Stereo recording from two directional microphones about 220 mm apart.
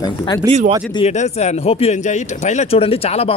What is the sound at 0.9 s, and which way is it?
Speech, 30° left (ahead or behind).